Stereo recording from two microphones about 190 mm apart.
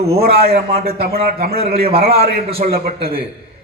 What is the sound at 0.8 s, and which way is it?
A man's voice, 55° right (ahead or behind).